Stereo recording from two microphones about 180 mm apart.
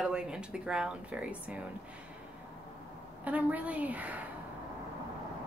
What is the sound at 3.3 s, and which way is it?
Speech, 10° right (ahead or behind).